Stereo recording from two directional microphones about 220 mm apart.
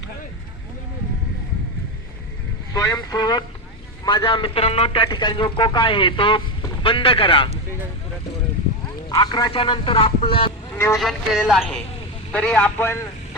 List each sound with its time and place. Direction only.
2.7 s speech: 10° left (ahead or behind)
9.0 s speech: 20° left (ahead or behind)
10.9 s speech: centre (ahead or behind)